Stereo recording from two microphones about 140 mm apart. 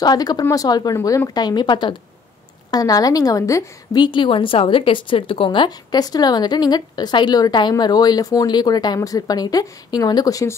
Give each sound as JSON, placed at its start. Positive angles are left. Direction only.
{"t": 0.0, "sound": "a woman's voice", "side_deg": 30}